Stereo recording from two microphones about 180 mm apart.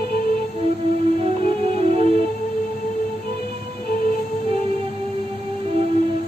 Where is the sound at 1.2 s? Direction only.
35° right (ahead or behind).